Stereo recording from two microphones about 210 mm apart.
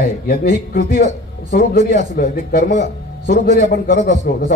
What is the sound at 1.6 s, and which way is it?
A man's voice, 45° left (ahead or behind).